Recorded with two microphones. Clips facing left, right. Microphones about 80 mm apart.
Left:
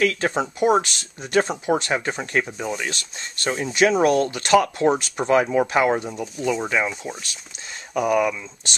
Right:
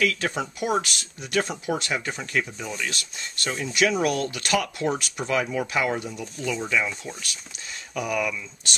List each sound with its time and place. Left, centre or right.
0.0 s speech: left
7.9 s speech: left